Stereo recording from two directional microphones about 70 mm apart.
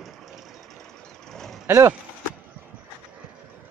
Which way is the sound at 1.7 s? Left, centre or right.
Right.